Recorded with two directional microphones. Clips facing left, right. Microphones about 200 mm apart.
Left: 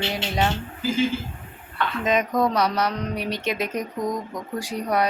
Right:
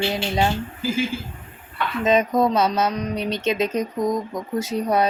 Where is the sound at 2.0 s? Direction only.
25° right (ahead or behind).